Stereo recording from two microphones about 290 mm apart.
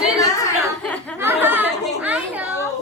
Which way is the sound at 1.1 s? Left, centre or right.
Centre.